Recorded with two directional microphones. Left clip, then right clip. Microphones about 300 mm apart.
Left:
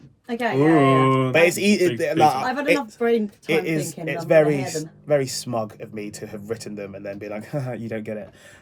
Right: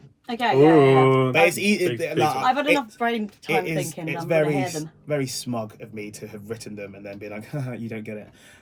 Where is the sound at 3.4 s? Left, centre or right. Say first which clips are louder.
Left 1 dB; centre.